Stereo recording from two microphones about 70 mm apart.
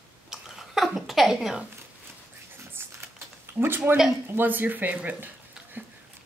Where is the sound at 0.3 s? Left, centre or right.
Centre.